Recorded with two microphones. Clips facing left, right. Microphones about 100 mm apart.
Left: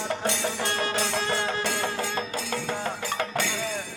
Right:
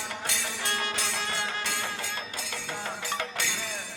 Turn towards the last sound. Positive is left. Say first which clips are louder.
# left 5 dB
turn(degrees=45)  # may be behind; listen again after turning